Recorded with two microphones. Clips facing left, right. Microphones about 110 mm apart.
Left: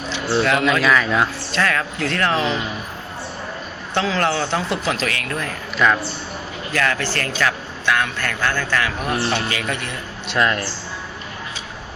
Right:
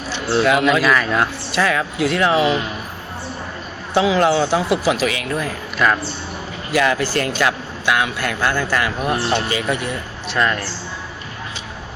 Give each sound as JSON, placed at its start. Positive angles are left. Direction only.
{"t": 0.3, "sound": "a man's voice", "side_deg": -5}
{"t": 3.9, "sound": "a man's voice", "side_deg": -10}
{"t": 10.2, "sound": "speech", "side_deg": 0}